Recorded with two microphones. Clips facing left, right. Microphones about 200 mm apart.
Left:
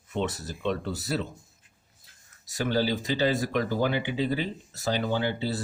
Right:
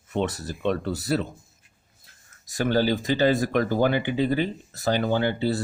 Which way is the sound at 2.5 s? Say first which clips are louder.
Right 4 dB; 55° right (ahead or behind).